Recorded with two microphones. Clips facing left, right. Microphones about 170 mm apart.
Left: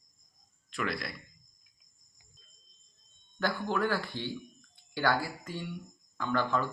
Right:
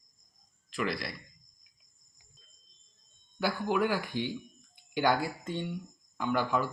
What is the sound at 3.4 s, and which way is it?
Speech, 10° right (ahead or behind).